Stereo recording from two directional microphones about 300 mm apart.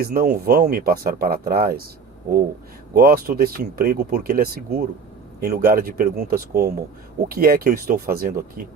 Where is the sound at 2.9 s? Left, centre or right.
Right.